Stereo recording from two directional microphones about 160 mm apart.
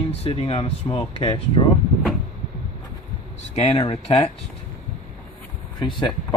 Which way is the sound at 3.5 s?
35° left (ahead or behind).